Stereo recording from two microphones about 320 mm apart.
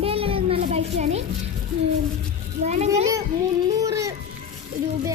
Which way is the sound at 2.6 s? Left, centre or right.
Right.